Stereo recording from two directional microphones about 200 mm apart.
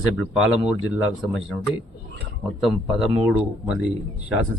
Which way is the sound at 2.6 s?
Centre (ahead or behind).